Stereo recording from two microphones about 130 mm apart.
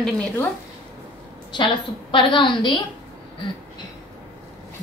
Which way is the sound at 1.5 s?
40° left (ahead or behind).